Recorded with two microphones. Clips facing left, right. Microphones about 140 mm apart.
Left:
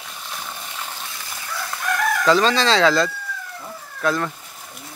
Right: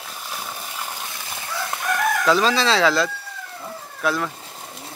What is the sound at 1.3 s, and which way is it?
Chicken, 20° right (ahead or behind).